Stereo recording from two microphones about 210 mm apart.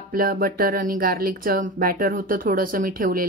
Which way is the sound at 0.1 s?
45° right (ahead or behind).